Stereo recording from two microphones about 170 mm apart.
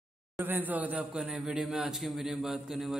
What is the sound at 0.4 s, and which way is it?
A man's voice, 10° right (ahead or behind).